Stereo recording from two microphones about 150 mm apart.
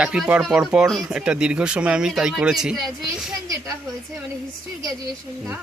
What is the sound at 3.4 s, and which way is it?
Speech, 20° right (ahead or behind).